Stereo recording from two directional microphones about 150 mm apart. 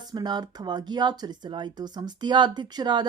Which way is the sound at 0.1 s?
30° right (ahead or behind).